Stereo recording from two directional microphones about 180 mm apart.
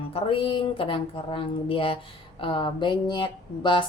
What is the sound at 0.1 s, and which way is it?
A woman's voice, 30° left (ahead or behind).